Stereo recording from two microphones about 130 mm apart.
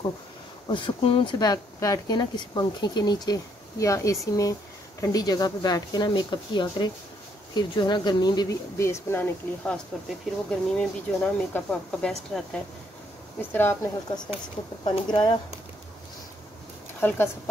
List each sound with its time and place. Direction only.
0.7 s speech: 40° left (ahead or behind)
1.4 s speech: 25° left (ahead or behind)
10.0 s speech: 5° left (ahead or behind)
13.4 s speech: 15° left (ahead or behind)
14.9 s speech: 35° left (ahead or behind)
17.0 s speech: 15° left (ahead or behind)